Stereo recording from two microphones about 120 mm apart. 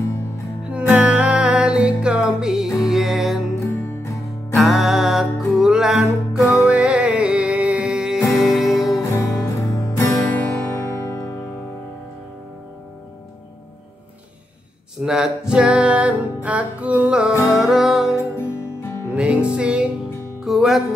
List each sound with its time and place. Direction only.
0.7 s music: 10° right (ahead or behind)
3.5 s music: 25° left (ahead or behind)
4.6 s music: centre (ahead or behind)
8.9 s music: 25° left (ahead or behind)
10.3 s music: 10° left (ahead or behind)
15.0 s music: 5° right (ahead or behind)
18.1 s music: 20° left (ahead or behind)
19.1 s music: 10° right (ahead or behind)